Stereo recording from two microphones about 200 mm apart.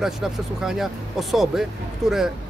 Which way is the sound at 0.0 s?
Centre (ahead or behind).